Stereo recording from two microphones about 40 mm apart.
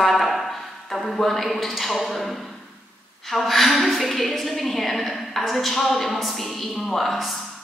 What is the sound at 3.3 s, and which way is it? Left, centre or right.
A woman's voice, centre.